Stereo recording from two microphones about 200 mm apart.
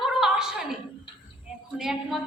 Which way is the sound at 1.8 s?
Centre (ahead or behind).